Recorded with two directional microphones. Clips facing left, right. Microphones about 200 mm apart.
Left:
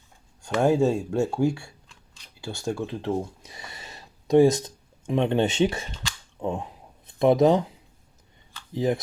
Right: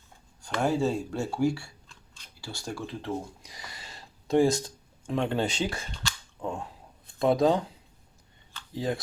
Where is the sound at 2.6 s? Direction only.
25° left (ahead or behind).